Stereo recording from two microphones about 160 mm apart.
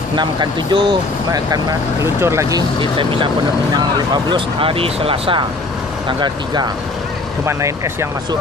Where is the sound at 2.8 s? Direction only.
30° right (ahead or behind).